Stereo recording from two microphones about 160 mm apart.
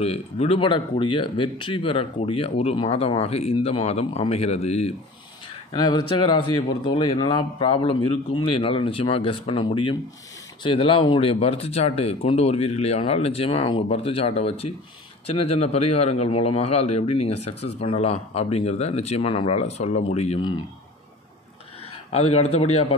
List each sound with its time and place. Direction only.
0.0 s a man's voice: 40° left (ahead or behind)
5.7 s a man's voice: 25° left (ahead or behind)
22.1 s a man's voice: 40° left (ahead or behind)